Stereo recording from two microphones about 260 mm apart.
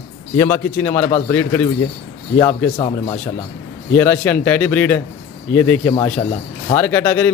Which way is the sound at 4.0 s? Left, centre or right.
Centre.